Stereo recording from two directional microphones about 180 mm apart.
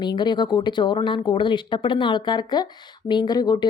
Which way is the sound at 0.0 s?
25° left (ahead or behind).